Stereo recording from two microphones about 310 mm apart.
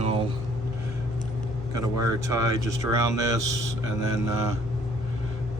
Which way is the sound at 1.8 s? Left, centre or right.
Centre.